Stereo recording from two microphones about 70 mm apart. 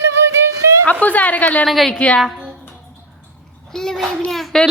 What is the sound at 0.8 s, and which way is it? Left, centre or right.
Speech, centre.